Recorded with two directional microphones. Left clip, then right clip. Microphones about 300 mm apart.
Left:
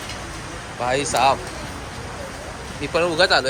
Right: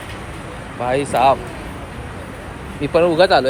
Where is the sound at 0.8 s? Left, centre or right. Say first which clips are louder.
Right 3 dB; centre.